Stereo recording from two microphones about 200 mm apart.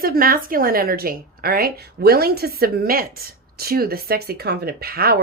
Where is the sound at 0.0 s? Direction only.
45° right (ahead or behind).